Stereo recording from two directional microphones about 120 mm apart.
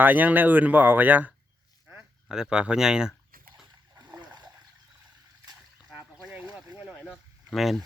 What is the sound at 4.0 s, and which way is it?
Splash, 35° right (ahead or behind).